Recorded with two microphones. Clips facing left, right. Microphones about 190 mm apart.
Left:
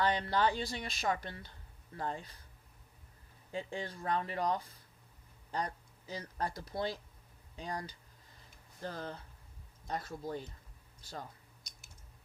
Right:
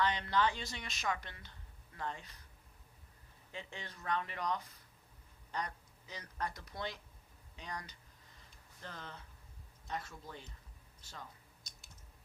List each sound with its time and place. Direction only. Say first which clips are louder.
0.0 s a woman's voice: left 2 dB; 35° left (ahead or behind)
3.5 s a woman's voice: left 9 dB; 35° left (ahead or behind)